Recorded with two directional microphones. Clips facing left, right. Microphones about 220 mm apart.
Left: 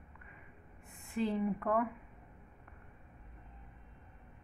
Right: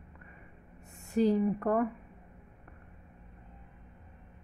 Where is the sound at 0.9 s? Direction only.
40° right (ahead or behind).